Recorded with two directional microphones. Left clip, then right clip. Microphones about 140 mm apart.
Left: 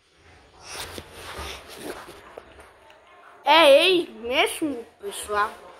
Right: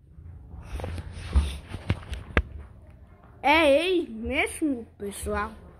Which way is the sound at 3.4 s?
15° right (ahead or behind).